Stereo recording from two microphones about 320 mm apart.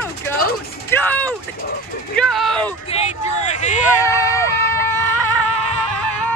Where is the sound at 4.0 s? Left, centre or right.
Centre.